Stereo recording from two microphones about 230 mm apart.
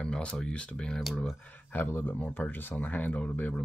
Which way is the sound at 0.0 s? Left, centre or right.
Centre.